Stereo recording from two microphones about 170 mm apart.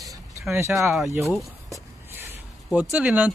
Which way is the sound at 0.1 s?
20° right (ahead or behind).